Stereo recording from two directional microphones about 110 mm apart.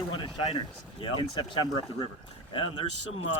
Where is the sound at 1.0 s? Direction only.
45° left (ahead or behind).